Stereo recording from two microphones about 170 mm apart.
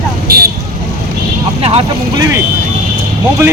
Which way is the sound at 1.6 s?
35° right (ahead or behind).